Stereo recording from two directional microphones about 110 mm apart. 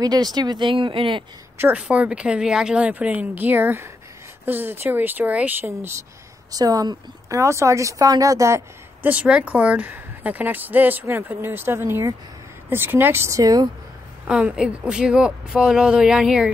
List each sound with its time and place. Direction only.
0.0 s speech: 40° right (ahead or behind)
1.6 s speech: 10° right (ahead or behind)
6.5 s speech: 35° right (ahead or behind)
9.0 s speech: 15° right (ahead or behind); by 13.7 s 30° right (ahead or behind)
14.2 s speech: 5° right (ahead or behind)